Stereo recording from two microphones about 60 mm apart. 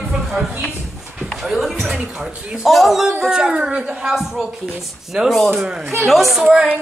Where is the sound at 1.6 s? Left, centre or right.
Centre.